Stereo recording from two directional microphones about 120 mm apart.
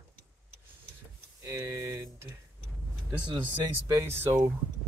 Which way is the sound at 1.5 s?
25° right (ahead or behind).